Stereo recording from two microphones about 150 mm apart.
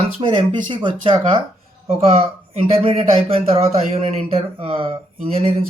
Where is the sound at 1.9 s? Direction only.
45° right (ahead or behind).